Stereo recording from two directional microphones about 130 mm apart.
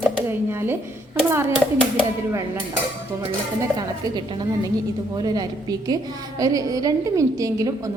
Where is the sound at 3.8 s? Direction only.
35° right (ahead or behind).